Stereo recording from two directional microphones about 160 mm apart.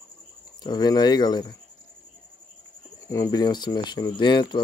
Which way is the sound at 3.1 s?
20° left (ahead or behind).